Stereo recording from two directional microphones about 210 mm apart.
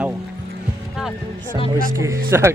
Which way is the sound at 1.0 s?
Centre (ahead or behind).